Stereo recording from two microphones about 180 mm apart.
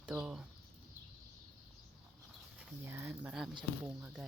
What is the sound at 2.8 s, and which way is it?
Speech, 15° right (ahead or behind).